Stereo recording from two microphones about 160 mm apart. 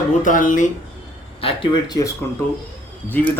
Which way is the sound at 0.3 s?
55° left (ahead or behind).